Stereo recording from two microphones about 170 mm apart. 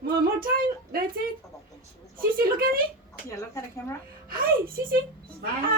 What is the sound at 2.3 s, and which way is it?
Speech, 60° right (ahead or behind).